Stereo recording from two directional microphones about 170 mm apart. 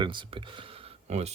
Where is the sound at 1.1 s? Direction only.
40° right (ahead or behind).